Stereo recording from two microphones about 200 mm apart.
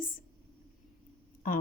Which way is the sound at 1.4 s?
45° left (ahead or behind).